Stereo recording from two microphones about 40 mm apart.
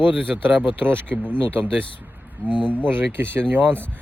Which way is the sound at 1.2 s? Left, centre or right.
Left.